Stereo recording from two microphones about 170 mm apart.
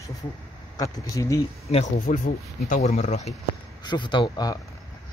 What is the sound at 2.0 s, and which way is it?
Speech, 50° left (ahead or behind).